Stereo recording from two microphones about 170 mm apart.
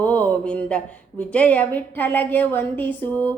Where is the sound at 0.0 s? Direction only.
10° left (ahead or behind).